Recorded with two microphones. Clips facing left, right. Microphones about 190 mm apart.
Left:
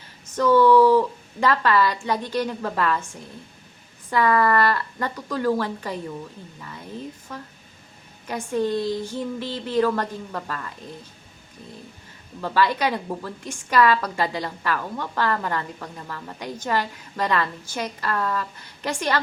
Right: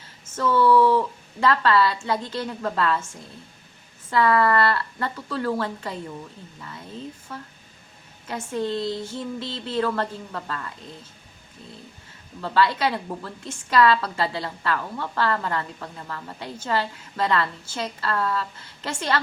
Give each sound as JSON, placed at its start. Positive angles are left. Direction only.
{"t": 0.3, "sound": "speech", "side_deg": 15}
{"t": 4.1, "sound": "a woman's voice", "side_deg": 15}
{"t": 8.3, "sound": "a woman's voice", "side_deg": 15}
{"t": 12.4, "sound": "a woman's voice", "side_deg": 15}